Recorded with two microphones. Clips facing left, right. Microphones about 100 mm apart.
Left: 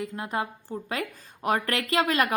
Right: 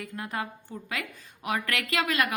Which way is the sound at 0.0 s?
25° left (ahead or behind).